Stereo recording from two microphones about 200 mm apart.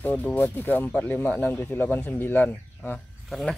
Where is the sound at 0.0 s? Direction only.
10° left (ahead or behind).